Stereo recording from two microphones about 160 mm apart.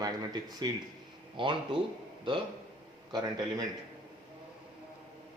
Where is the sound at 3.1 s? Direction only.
25° right (ahead or behind).